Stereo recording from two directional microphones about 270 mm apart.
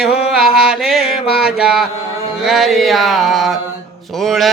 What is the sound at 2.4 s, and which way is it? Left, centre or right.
Mantra, centre.